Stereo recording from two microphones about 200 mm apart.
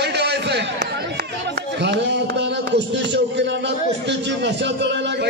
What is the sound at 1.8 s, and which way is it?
Music, 60° right (ahead or behind).